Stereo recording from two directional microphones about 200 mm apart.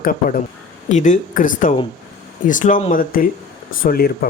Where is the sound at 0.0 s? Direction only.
45° left (ahead or behind).